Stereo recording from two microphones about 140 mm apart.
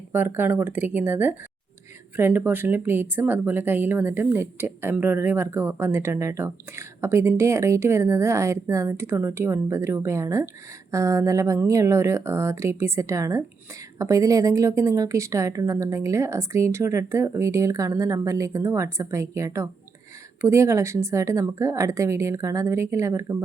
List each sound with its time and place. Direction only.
0.1 s a woman's voice: 15° right (ahead or behind)